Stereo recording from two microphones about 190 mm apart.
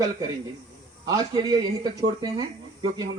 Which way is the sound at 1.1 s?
20° right (ahead or behind).